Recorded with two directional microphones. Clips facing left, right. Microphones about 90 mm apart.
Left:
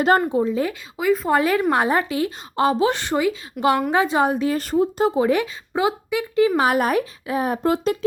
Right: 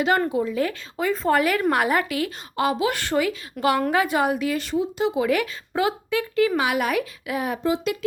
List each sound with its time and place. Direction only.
0.3 s speech: 25° left (ahead or behind)
0.9 s speech: 5° left (ahead or behind)
1.3 s speech: 25° left (ahead or behind)
3.0 s speech: 20° left (ahead or behind)
3.6 s speech: 5° left (ahead or behind)
3.9 s speech: 25° left (ahead or behind)
6.6 s a woman's voice: 40° left (ahead or behind)
7.6 s speech: 50° left (ahead or behind)